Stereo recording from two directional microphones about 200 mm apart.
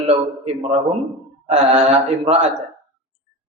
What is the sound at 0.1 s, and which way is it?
Speech, 30° right (ahead or behind).